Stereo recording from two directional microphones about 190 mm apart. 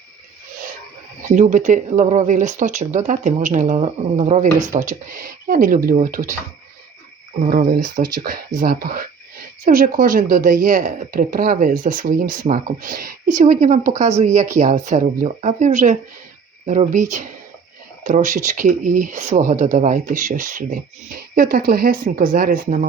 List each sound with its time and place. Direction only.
1.3 s a woman's voice: 40° right (ahead or behind)
7.5 s a woman's voice: 45° right (ahead or behind)